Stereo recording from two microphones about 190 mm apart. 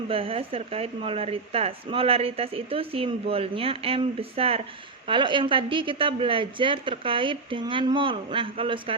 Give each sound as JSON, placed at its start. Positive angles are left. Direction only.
{"t": 0.1, "sound": "a woman's voice", "side_deg": -30}